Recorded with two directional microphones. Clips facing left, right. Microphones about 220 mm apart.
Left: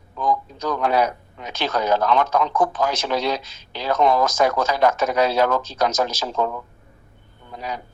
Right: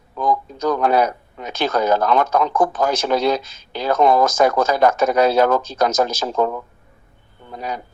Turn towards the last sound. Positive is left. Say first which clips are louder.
# right 3 dB
turn(degrees=-45)  # may be behind; listen again after turning